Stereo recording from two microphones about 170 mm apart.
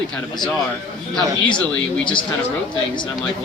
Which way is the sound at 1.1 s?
5° left (ahead or behind).